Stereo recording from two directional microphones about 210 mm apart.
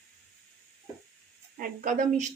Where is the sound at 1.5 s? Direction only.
40° right (ahead or behind).